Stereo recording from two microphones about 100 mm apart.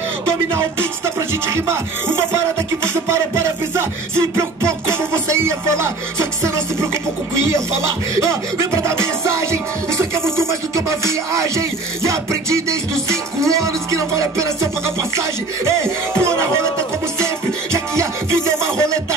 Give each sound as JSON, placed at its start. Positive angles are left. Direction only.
{"t": 0.6, "sound": "music", "side_deg": -25}
{"t": 2.8, "sound": "music", "side_deg": -30}
{"t": 8.2, "sound": "music", "side_deg": -30}
{"t": 16.2, "sound": "music", "side_deg": -25}